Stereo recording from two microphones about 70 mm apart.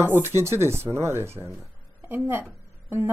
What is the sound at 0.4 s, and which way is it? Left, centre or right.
A woman's voice, right.